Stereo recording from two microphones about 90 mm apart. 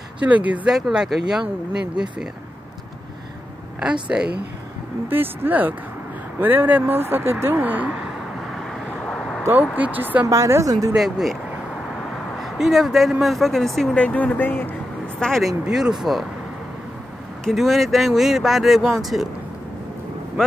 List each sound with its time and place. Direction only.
0.2 s speech: 15° right (ahead or behind)
0.7 s speech: 5° right (ahead or behind)
3.8 s speech: 10° right (ahead or behind)
5.0 s speech: 25° right (ahead or behind)
9.0 s a sound: 5° left (ahead or behind)
9.5 s speech: 20° right (ahead or behind)
10.3 s a woman's voice: 35° right (ahead or behind)
11.0 s speech: 5° right (ahead or behind)
12.4 s speech: 5° right (ahead or behind)
13.9 s speech: 15° left (ahead or behind)
15.1 s speech: 5° left (ahead or behind)
15.6 s speech: 5° right (ahead or behind)
17.5 s speech: centre (ahead or behind)